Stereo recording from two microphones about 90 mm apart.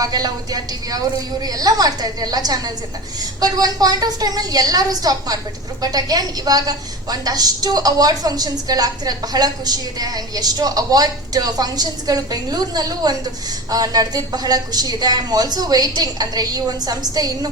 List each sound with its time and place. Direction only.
0.0 s a woman's voice: 45° right (ahead or behind)